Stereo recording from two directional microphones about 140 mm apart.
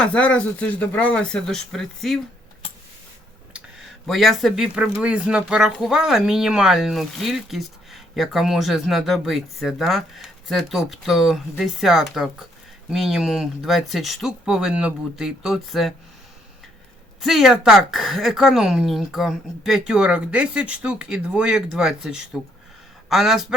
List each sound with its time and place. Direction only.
0.0 s speech: 10° left (ahead or behind)
3.5 s speech: 5° right (ahead or behind)
17.2 s speech: centre (ahead or behind)